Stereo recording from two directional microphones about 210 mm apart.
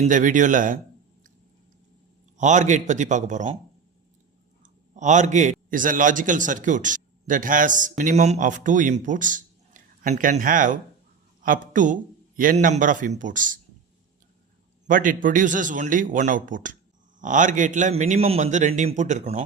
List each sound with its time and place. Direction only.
0.0 s a man's voice: 35° right (ahead or behind)
2.4 s a man's voice: 35° right (ahead or behind)
4.6 s a man's voice: 35° right (ahead or behind)
14.8 s a man's voice: 40° right (ahead or behind)